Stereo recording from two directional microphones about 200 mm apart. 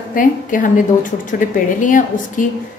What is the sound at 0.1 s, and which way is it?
A woman's voice, 40° left (ahead or behind).